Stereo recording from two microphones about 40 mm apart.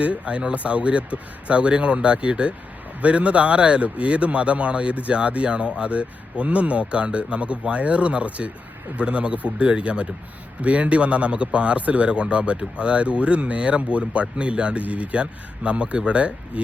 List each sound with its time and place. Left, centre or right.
0.0 s a man's voice: right